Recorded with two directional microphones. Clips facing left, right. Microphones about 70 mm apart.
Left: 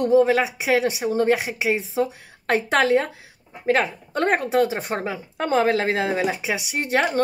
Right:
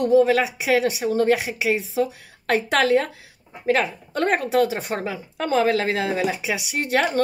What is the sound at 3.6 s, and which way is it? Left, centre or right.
A woman's voice, left.